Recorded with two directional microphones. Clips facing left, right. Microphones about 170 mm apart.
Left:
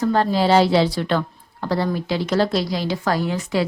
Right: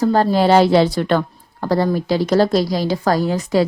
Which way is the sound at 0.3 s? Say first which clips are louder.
Right 3 dB; 50° right (ahead or behind).